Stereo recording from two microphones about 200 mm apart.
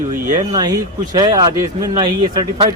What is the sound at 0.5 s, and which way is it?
Speech, 20° right (ahead or behind).